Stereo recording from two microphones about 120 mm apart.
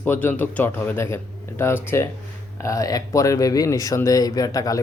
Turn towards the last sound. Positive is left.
turn(degrees=30)  # may be behind; listen again after turning